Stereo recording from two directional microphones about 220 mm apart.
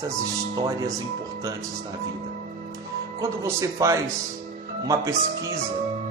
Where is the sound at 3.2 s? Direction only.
15° right (ahead or behind).